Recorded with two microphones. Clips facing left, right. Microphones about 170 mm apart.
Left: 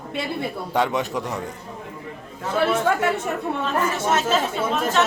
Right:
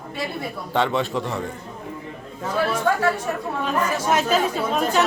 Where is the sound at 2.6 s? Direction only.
25° left (ahead or behind).